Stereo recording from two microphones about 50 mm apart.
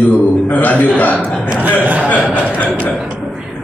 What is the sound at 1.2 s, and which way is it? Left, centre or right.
Speech, centre.